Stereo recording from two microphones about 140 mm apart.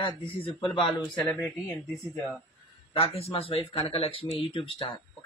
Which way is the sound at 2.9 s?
45° left (ahead or behind).